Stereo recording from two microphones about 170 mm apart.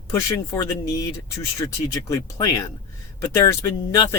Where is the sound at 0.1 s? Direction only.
15° left (ahead or behind).